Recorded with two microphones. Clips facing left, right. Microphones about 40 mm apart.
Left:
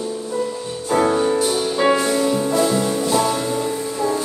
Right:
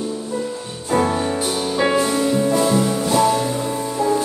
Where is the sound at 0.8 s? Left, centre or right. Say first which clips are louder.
Left 2 dB; centre.